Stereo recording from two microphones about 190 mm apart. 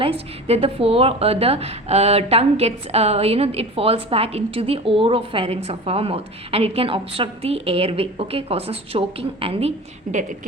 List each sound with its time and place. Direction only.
0.0 s a woman's voice: 30° right (ahead or behind)